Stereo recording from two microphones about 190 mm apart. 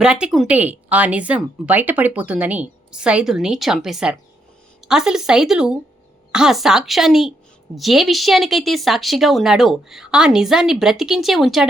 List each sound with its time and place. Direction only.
0.0 s a woman's voice: 5° right (ahead or behind)